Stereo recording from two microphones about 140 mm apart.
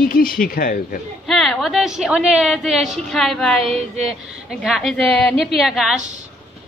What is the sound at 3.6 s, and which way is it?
Speech, 45° right (ahead or behind).